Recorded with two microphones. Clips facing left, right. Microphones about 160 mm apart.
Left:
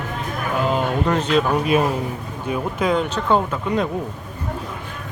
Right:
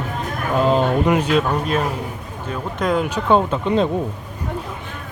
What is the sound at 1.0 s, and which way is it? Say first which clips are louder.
Speech: right 1 dB; 10° right (ahead or behind).